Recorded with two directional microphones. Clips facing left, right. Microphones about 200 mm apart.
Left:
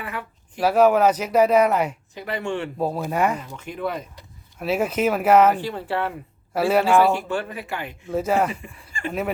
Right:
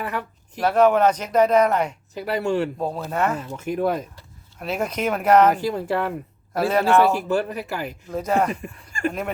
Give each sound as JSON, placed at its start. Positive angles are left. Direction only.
{"t": 0.6, "sound": "speech", "side_deg": 10}
{"t": 2.1, "sound": "speech", "side_deg": -40}
{"t": 2.7, "sound": "speech", "side_deg": 10}
{"t": 3.6, "sound": "speech", "side_deg": -45}
{"t": 4.6, "sound": "speech", "side_deg": 5}
{"t": 5.5, "sound": "speech", "side_deg": -40}
{"t": 6.5, "sound": "speech", "side_deg": 10}
{"t": 7.3, "sound": "speech", "side_deg": -40}
{"t": 8.0, "sound": "speech", "side_deg": 5}
{"t": 8.9, "sound": "a sound", "side_deg": -45}